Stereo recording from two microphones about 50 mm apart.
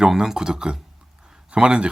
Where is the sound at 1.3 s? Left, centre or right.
Centre.